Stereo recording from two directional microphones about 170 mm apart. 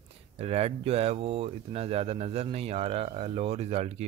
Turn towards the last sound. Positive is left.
turn(degrees=-40)  # may be behind; listen again after turning